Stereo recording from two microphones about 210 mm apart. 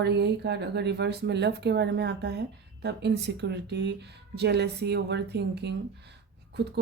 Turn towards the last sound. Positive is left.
turn(degrees=-50)  # may be behind; listen again after turning